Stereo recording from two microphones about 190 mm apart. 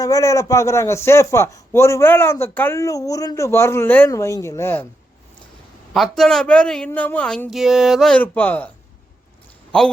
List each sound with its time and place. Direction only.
0.0 s a man's voice: 15° left (ahead or behind)
5.9 s a man's voice: centre (ahead or behind)